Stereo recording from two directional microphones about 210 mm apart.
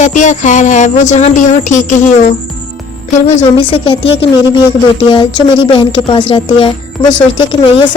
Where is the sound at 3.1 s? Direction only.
35° left (ahead or behind).